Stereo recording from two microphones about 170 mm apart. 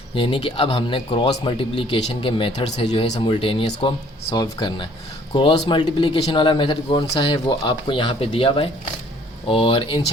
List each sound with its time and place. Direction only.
0.1 s speech: 30° left (ahead or behind)